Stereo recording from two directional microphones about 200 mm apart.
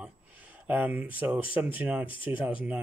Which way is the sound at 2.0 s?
25° left (ahead or behind).